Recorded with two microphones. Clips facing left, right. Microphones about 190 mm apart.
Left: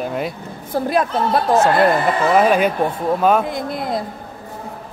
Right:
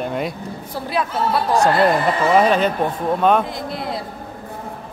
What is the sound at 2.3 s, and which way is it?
A man's voice, 10° left (ahead or behind).